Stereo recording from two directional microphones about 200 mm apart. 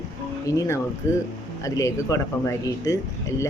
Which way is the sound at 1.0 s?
15° left (ahead or behind).